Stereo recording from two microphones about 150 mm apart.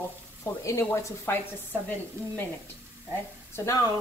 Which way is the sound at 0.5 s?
20° left (ahead or behind).